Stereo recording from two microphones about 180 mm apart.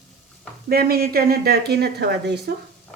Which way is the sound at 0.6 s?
60° right (ahead or behind).